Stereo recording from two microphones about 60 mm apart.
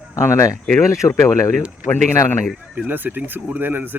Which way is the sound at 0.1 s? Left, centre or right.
Left.